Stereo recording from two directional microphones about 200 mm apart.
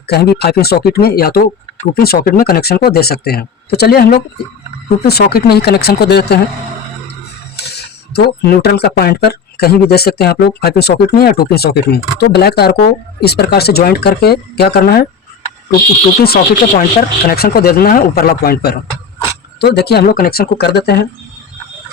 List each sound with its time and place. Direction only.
0.1 s speech: 55° left (ahead or behind)
7.6 s speech: 55° left (ahead or behind)
16.2 s speech: 50° left (ahead or behind)